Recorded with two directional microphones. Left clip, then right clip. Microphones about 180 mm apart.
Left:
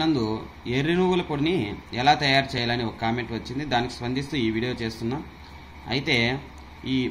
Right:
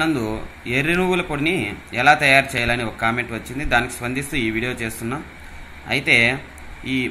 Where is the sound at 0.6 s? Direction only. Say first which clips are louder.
Right 4 dB; 5° left (ahead or behind).